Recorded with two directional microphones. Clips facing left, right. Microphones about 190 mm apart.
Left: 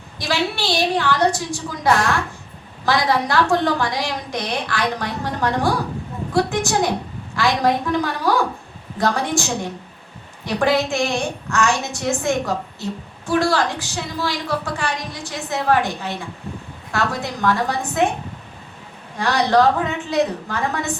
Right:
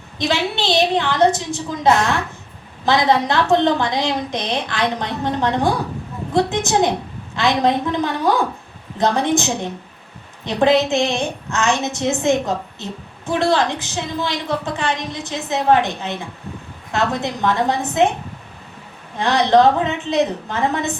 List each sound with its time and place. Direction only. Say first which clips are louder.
0.2 s a woman's voice: right 2 dB; 20° right (ahead or behind)
19.1 s a woman's voice: right 3 dB; 20° right (ahead or behind)